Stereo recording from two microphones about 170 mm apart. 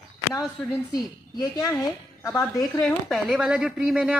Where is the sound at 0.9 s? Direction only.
25° left (ahead or behind).